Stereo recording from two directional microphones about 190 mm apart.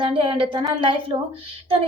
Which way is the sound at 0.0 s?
25° right (ahead or behind).